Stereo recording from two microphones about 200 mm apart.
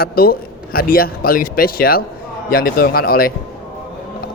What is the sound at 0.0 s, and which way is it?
A man's voice, 50° left (ahead or behind).